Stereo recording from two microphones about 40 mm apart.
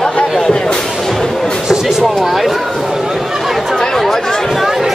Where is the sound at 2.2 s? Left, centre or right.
Centre.